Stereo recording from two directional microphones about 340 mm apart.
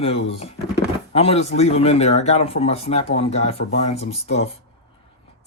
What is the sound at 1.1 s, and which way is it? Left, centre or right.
Speech, centre.